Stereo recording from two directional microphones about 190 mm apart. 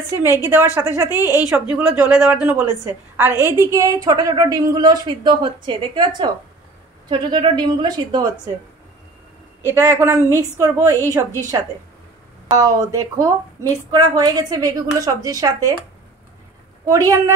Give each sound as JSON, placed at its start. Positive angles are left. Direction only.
{"t": 0.2, "sound": "a woman's voice", "side_deg": -10}
{"t": 9.8, "sound": "a woman's voice", "side_deg": -15}
{"t": 12.4, "sound": "a woman's voice", "side_deg": -20}
{"t": 16.9, "sound": "a woman's voice", "side_deg": -15}